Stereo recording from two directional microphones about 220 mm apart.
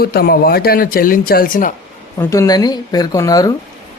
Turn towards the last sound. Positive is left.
turn(degrees=15)  # may be behind; listen again after turning